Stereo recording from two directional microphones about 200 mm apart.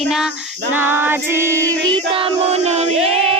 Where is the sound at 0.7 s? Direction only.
10° right (ahead or behind).